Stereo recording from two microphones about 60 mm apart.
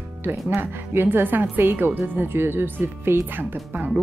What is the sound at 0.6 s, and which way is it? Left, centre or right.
Speech, right.